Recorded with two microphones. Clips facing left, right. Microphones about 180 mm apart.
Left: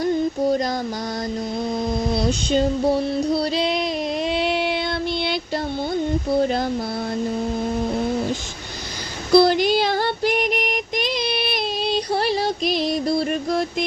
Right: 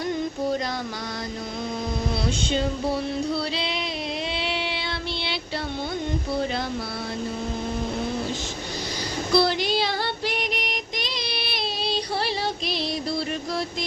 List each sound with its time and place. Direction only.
3.3 s music: 45° left (ahead or behind)
4.3 s a sound: 45° left (ahead or behind)
9.3 s female singing: 50° left (ahead or behind)